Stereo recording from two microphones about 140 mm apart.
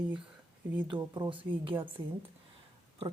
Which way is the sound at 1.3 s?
35° right (ahead or behind).